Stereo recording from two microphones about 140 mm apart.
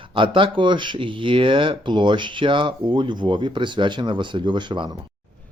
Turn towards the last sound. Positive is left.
turn(degrees=-35)  # may be behind; listen again after turning